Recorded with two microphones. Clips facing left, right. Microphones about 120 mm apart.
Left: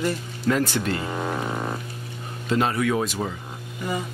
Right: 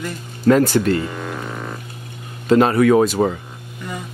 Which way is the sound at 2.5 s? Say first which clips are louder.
Right 9 dB; 60° right (ahead or behind).